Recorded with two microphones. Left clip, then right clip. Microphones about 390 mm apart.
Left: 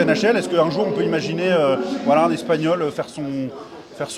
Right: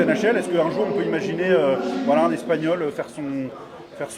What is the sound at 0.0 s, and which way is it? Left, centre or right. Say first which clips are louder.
A man's voice: left 2 dB; left.